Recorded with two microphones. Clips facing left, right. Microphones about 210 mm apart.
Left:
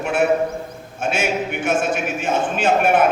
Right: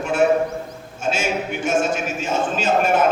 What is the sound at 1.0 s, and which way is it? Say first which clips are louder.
A man's voice: left 1 dB; 60° left (ahead or behind).